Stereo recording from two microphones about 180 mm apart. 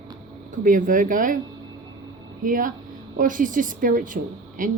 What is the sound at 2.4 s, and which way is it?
Speech, 50° right (ahead or behind).